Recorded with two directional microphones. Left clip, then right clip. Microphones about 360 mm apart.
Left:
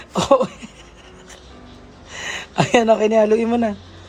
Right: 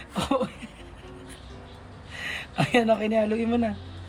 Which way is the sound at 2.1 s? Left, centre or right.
Centre.